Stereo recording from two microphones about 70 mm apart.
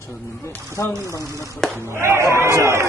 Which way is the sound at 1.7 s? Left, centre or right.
Right.